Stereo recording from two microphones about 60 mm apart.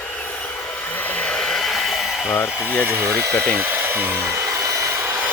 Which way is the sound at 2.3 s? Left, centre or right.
Left.